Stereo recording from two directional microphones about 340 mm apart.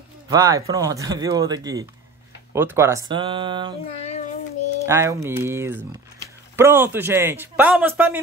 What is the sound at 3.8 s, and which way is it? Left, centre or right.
Child singing, centre.